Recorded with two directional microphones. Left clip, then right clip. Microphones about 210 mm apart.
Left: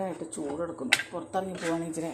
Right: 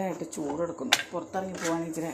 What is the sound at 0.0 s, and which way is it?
A woman's voice, 10° right (ahead or behind).